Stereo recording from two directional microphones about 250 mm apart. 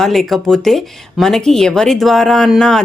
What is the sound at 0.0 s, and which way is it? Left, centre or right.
Speech, centre.